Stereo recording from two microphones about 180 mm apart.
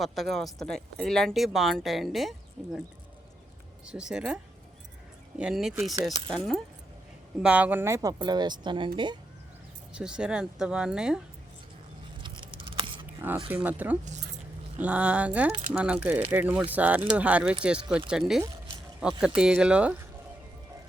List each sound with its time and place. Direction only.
0.0 s speech: centre (ahead or behind)
3.8 s speech: 5° right (ahead or behind)
5.4 s speech: 5° right (ahead or behind); by 8.9 s 25° right (ahead or behind)
9.9 s speech: 5° right (ahead or behind)
12.2 s scissors: 25° right (ahead or behind)
12.6 s a sound: 30° right (ahead or behind)
13.5 s speech: 10° right (ahead or behind)